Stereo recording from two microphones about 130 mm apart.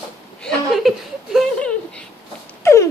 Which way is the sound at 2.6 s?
20° left (ahead or behind).